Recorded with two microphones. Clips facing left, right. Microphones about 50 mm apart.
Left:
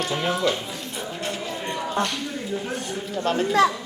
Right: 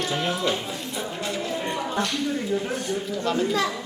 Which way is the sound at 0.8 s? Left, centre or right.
Centre.